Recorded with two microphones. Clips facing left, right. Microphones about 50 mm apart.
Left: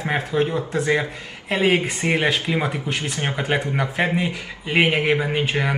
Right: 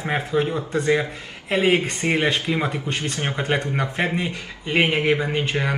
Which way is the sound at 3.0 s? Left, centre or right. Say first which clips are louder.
Even; left.